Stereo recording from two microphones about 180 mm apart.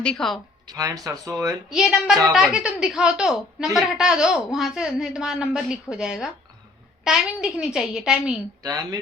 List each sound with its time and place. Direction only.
0.0 s a woman's voice: 5° left (ahead or behind)
0.7 s speech: 20° right (ahead or behind)
1.7 s a woman's voice: 5° right (ahead or behind)
8.6 s speech: 20° right (ahead or behind)